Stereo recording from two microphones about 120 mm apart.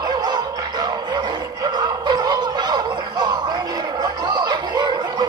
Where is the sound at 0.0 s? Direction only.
35° right (ahead or behind).